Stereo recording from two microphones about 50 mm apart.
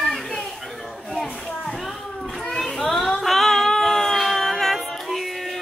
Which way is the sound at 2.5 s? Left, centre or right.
Centre.